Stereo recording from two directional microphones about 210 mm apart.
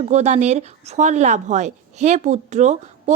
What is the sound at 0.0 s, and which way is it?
Speech, 30° right (ahead or behind).